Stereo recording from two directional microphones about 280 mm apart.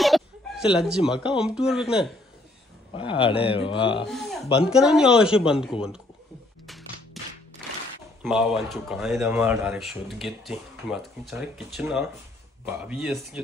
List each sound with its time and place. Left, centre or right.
0.0 s chicken: centre
1.4 s speech: centre
2.9 s a man's voice: centre
4.1 s a sound: centre
4.6 s speech: centre
7.2 s music: centre
8.2 s speech: centre